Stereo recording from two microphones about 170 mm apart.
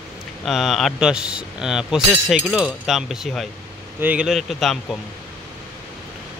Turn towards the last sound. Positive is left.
turn(degrees=0)  # may be behind; listen again after turning